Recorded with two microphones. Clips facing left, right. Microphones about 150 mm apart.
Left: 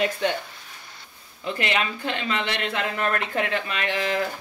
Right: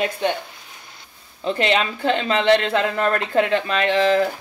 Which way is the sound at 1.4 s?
30° right (ahead or behind).